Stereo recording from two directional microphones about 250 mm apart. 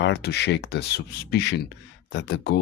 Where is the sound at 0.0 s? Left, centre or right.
Left.